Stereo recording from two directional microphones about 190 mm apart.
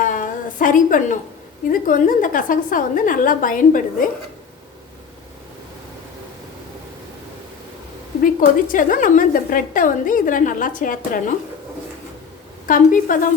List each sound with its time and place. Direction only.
0.0 s a sound: 45° left (ahead or behind)
1.7 s a woman's voice: 45° left (ahead or behind)
8.2 s a woman's voice: 45° left (ahead or behind)
12.6 s a woman's voice: 45° left (ahead or behind)